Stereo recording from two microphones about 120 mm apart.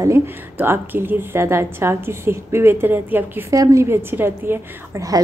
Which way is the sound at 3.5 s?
25° right (ahead or behind).